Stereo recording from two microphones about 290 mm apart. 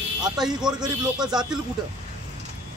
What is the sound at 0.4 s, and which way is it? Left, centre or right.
A man's voice, centre.